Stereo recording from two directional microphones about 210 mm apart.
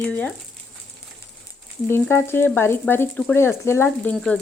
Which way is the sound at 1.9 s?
10° left (ahead or behind).